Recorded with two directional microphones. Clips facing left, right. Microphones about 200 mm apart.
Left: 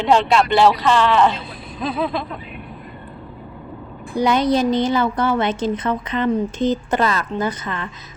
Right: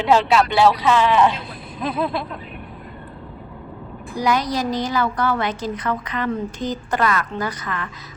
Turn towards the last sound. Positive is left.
turn(degrees=25)  # may be behind; listen again after turning